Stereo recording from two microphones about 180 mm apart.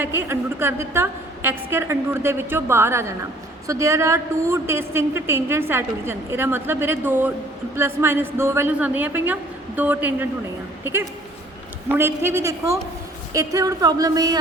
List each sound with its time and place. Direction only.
0.0 s a woman's voice: 15° right (ahead or behind)